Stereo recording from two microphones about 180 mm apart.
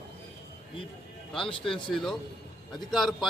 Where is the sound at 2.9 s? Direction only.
Centre (ahead or behind).